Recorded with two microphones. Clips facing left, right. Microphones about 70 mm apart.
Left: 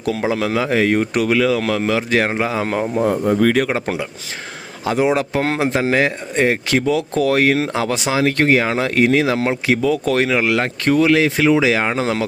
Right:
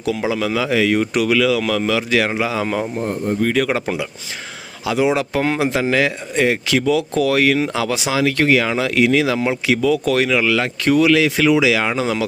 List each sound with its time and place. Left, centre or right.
0.0 s speech: left
2.9 s speech: left
4.9 s speech: left